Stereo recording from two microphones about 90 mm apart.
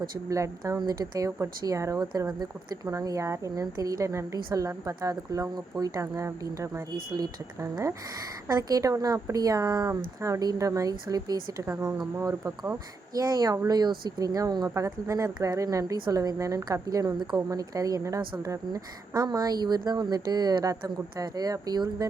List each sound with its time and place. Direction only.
0.0 s a woman's voice: 35° right (ahead or behind)
12.3 s speech: 25° right (ahead or behind)
13.1 s a woman's voice: 45° right (ahead or behind)